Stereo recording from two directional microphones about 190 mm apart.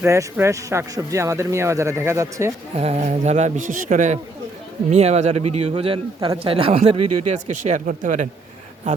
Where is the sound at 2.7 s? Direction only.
35° right (ahead or behind).